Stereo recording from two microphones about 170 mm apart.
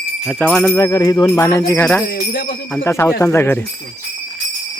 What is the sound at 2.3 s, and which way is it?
Speech, 60° left (ahead or behind).